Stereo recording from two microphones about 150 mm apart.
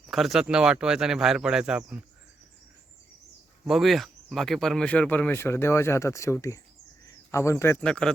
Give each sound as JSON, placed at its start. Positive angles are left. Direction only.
{"t": 0.1, "sound": "speech", "side_deg": 0}
{"t": 3.7, "sound": "speech", "side_deg": 0}